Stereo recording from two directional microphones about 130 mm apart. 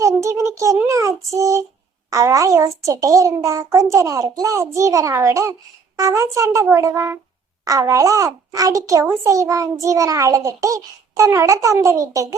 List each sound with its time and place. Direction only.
0.0 s a sound: 25° right (ahead or behind)
0.9 s child singing: 25° right (ahead or behind)
2.0 s a child's voice: 25° right (ahead or behind)